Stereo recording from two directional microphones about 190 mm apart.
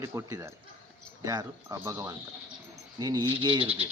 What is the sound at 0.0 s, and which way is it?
Speech, 15° right (ahead or behind).